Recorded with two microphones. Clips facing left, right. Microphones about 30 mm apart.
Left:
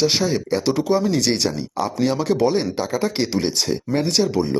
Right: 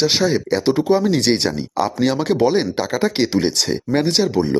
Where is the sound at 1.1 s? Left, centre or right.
Right.